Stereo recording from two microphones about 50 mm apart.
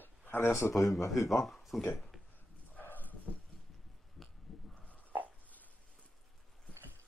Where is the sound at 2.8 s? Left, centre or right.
Left.